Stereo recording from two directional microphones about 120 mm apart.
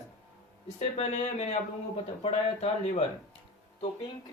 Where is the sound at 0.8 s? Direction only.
75° left (ahead or behind); by 3.4 s 55° left (ahead or behind).